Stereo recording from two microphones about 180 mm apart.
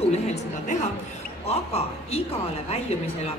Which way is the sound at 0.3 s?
40° left (ahead or behind).